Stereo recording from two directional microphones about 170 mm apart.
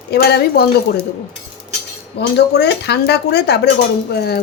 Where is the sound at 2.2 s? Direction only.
75° left (ahead or behind).